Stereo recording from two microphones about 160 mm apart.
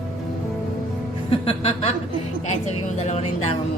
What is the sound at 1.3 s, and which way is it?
Music, 40° left (ahead or behind).